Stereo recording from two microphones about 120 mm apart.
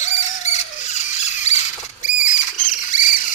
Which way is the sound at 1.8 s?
90° left.